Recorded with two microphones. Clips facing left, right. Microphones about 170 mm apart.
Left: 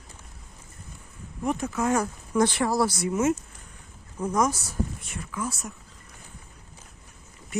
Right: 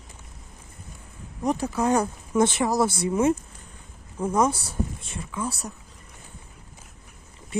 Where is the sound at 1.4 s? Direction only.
35° right (ahead or behind).